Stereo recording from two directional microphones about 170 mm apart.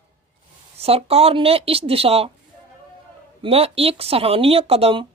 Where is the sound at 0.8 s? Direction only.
35° right (ahead or behind).